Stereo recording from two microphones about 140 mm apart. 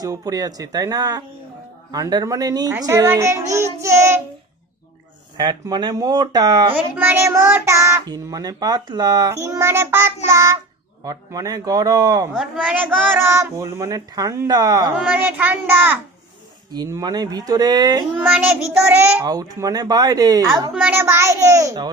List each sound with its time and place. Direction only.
0.0 s a child's voice: 25° right (ahead or behind)
5.4 s a child's voice: 30° right (ahead or behind)
6.9 s a child's voice: 15° right (ahead or behind)
12.3 s a child's voice: 10° right (ahead or behind); by 14.8 s 25° right (ahead or behind)
14.9 s a child's voice: 10° right (ahead or behind)
16.7 s a child's voice: 30° right (ahead or behind)
18.2 s a child's voice: 15° right (ahead or behind)
19.2 s a child's voice: 25° right (ahead or behind)
20.5 s a child's voice: 5° right (ahead or behind); by 21.8 s 25° right (ahead or behind)